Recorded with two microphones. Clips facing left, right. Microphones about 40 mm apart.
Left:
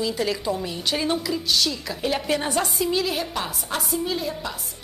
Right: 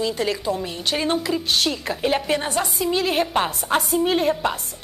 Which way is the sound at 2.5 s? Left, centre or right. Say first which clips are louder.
Right 1 dB; centre.